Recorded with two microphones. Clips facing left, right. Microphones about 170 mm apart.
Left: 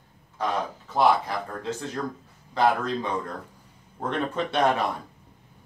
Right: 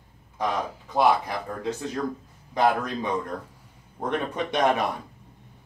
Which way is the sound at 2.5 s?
15° right (ahead or behind).